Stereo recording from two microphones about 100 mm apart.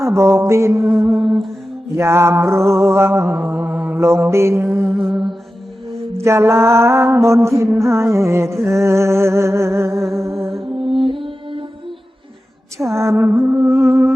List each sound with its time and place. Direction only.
0.0 s music: 25° right (ahead or behind)
1.2 s music: centre (ahead or behind)
2.0 s music: 25° right (ahead or behind)
4.9 s music: 5° right (ahead or behind)
6.1 s music: 25° right (ahead or behind)
10.6 s music: 60° right (ahead or behind)
13.0 s music: 25° right (ahead or behind)